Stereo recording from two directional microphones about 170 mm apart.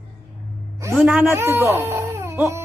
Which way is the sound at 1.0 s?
5° right (ahead or behind).